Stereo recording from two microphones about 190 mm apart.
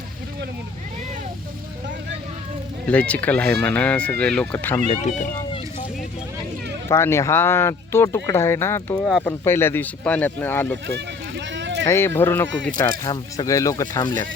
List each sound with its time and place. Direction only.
2.8 s speech: 5° left (ahead or behind)
4.9 s speech: 40° left (ahead or behind)
6.8 s speech: 15° left (ahead or behind)
9.0 s speech: centre (ahead or behind)
9.4 s speech: 10° left (ahead or behind)
10.8 s a sound: 65° right (ahead or behind)
11.9 s speech: 15° left (ahead or behind)